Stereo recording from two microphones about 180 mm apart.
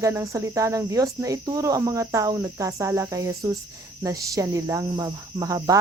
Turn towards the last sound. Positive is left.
turn(degrees=-20)  # may be behind; listen again after turning